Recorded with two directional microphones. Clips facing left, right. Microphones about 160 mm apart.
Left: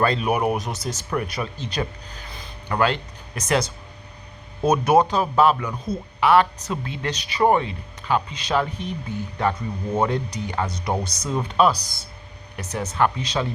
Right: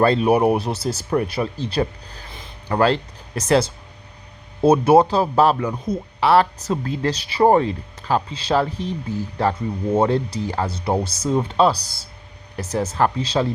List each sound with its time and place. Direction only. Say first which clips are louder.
0.0 s speech: right 5 dB; 30° right (ahead or behind)
5.7 s speech: right 3 dB; 20° right (ahead or behind)
6.1 s speech: right 1 dB; 35° right (ahead or behind)